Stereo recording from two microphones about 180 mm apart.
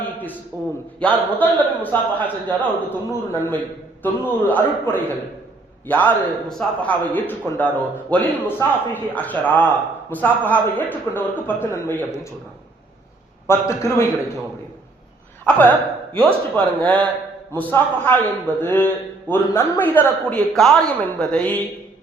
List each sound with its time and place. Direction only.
0.5 s a man's voice: 10° left (ahead or behind)
13.5 s a man's voice: 15° left (ahead or behind)
15.4 s a man's voice: 10° left (ahead or behind)